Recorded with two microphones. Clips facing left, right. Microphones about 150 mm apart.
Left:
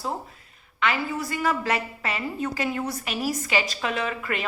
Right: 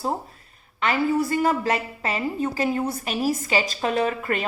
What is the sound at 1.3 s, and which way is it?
A woman's voice, 40° right (ahead or behind).